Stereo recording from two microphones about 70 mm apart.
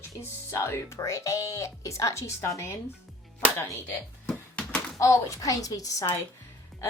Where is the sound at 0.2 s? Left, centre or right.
Left.